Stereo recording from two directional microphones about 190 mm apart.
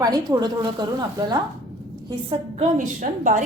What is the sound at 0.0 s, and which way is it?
A woman's voice, 20° right (ahead or behind).